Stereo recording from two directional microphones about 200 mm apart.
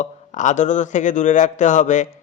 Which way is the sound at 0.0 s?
40° left (ahead or behind).